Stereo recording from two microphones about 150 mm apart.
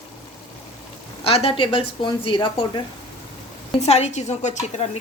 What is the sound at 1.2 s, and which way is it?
A woman's voice, 40° left (ahead or behind).